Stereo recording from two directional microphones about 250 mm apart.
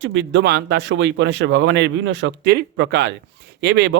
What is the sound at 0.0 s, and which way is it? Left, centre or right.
Speech, right.